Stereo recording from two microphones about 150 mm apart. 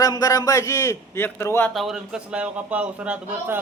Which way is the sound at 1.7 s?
Centre (ahead or behind).